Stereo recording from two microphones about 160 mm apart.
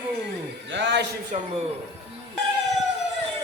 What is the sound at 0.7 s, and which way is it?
Speech, 90° right.